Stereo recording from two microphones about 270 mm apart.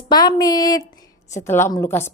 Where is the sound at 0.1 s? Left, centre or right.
Centre.